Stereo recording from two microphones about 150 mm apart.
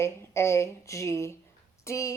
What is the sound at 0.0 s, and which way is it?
A woman's voice, 20° left (ahead or behind).